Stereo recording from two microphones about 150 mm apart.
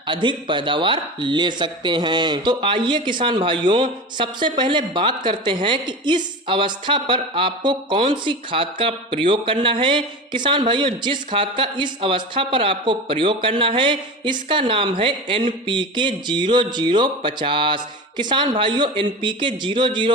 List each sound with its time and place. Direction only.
0.1 s a woman's voice: 30° right (ahead or behind)